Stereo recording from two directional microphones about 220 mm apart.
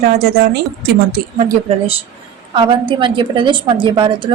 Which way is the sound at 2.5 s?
20° right (ahead or behind).